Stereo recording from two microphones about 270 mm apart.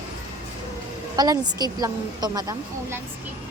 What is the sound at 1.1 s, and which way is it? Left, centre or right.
A woman's voice, centre.